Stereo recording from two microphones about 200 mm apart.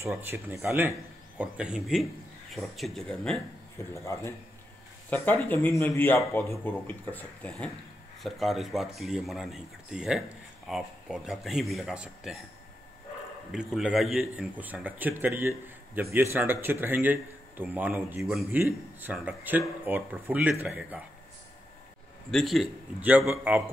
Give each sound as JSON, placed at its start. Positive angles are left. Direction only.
{"t": 0.0, "sound": "a man's voice", "side_deg": -10}
{"t": 3.7, "sound": "speech", "side_deg": 15}
{"t": 13.5, "sound": "a man's voice", "side_deg": 0}
{"t": 22.3, "sound": "speech", "side_deg": 0}